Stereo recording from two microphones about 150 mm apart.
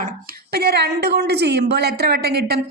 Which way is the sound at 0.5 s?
90° right.